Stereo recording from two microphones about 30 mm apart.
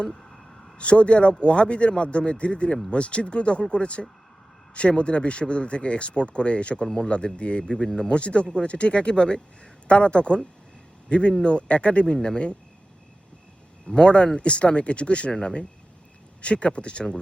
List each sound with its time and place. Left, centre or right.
0.8 s speech: left
13.8 s speech: left
15.3 s speech: left
16.4 s speech: left